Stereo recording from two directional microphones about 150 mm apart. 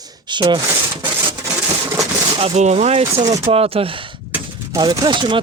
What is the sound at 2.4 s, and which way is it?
Speech, 45° right (ahead or behind).